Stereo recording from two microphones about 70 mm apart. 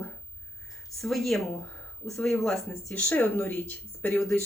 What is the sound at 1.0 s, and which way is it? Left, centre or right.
Speech, centre.